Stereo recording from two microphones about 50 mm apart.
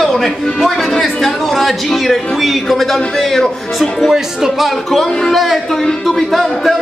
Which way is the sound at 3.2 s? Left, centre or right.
Centre.